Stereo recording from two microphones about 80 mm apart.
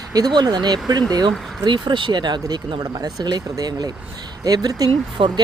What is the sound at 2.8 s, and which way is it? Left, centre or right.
Speech, right.